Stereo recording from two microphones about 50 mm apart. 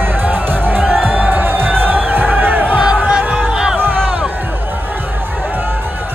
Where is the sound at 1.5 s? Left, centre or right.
Right.